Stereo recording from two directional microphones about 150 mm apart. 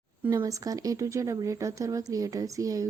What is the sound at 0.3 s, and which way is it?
Speech, 20° right (ahead or behind).